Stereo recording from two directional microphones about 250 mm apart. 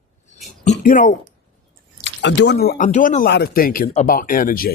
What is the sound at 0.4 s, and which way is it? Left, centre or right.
Speech, left.